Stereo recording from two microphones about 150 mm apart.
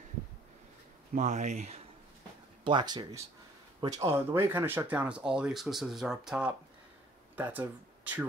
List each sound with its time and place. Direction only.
1.1 s speech: 55° right (ahead or behind)
2.6 s speech: 30° right (ahead or behind); by 8.3 s 10° right (ahead or behind)